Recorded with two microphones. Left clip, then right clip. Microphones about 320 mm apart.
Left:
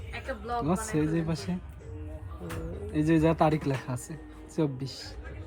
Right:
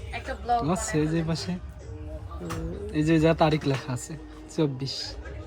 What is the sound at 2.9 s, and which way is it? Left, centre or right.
Speech, centre.